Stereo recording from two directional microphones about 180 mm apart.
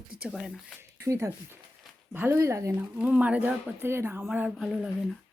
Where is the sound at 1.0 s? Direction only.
15° right (ahead or behind).